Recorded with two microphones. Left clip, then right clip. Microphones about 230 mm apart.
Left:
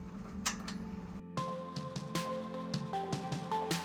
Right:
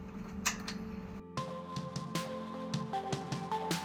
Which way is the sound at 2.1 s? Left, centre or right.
Centre.